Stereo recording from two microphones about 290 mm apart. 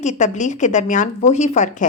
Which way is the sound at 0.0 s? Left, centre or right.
Left.